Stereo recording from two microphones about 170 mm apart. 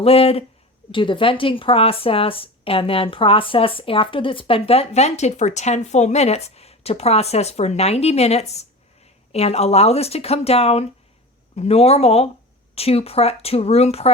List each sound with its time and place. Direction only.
0.0 s a woman's voice: 35° left (ahead or behind)